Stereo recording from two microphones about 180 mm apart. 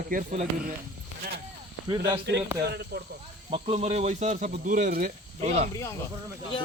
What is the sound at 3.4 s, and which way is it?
Speech, 35° right (ahead or behind).